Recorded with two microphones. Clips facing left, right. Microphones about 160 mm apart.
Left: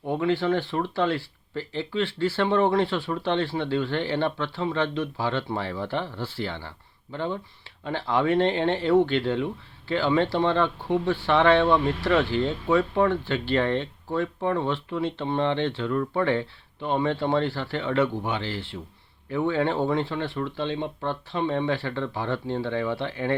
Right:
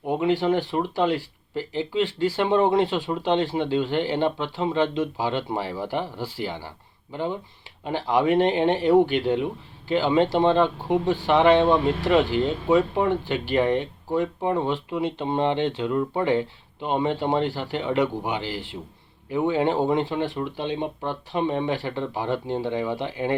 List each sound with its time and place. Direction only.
0.0 s speech: 20° right (ahead or behind)